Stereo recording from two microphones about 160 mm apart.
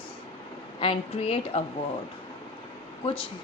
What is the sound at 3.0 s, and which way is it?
Speech, 30° left (ahead or behind).